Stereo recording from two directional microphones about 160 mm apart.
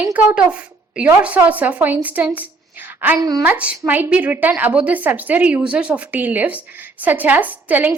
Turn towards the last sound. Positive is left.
turn(degrees=-10)  # may be behind; listen again after turning